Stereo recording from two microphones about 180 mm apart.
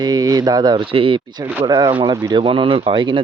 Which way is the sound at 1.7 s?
25° right (ahead or behind).